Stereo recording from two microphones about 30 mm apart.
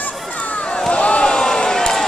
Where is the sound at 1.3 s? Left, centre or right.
Left.